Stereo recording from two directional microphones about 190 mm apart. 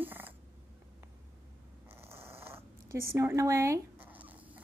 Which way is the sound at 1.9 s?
15° right (ahead or behind).